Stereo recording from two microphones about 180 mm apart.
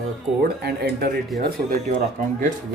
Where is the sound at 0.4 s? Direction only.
65° right (ahead or behind).